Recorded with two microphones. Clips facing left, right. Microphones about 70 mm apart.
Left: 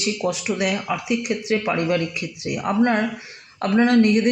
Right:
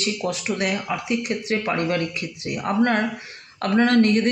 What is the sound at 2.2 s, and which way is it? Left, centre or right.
A man's voice, centre.